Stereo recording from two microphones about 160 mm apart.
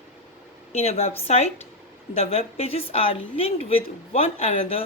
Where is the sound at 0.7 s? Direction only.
40° left (ahead or behind).